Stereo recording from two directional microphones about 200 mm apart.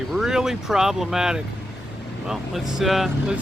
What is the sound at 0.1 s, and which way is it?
Speech, centre (ahead or behind).